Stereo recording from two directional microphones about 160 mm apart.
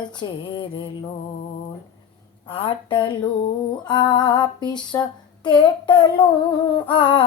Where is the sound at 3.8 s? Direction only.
30° left (ahead or behind).